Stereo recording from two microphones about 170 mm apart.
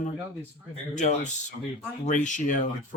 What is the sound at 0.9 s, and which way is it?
Speech, 45° left (ahead or behind).